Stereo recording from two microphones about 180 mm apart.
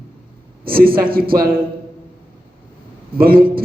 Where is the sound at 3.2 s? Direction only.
55° right (ahead or behind).